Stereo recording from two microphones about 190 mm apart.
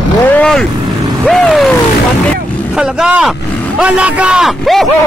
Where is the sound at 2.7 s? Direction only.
5° right (ahead or behind).